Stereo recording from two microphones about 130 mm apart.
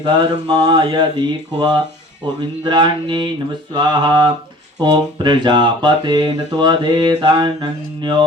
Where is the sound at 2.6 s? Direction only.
35° right (ahead or behind).